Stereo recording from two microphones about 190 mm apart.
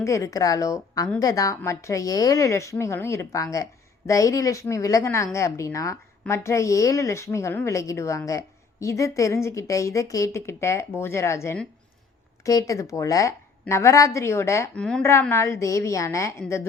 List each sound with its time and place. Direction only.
0.0 s a woman's voice: 15° left (ahead or behind)